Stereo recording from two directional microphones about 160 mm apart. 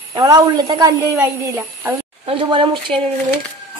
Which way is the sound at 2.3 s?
35° right (ahead or behind).